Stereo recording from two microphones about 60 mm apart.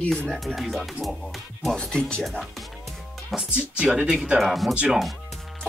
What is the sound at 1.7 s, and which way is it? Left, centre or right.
Speech, centre.